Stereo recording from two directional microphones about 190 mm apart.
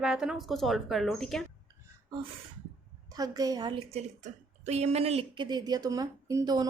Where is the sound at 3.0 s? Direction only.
20° right (ahead or behind).